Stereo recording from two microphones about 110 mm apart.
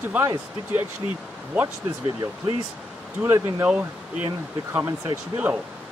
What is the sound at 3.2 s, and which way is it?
Speech, 25° right (ahead or behind).